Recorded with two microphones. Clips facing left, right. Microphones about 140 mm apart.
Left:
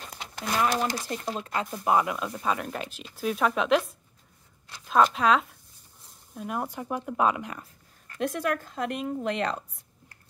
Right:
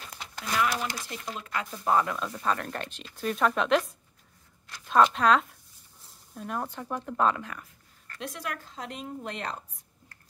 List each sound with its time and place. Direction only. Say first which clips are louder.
0.6 s speech: left 3 dB; 35° left (ahead or behind)
1.9 s speech: left 1 dB; 10° left (ahead or behind)
8.2 s a woman's voice: left 9 dB; 55° left (ahead or behind); by 9.6 s 90° left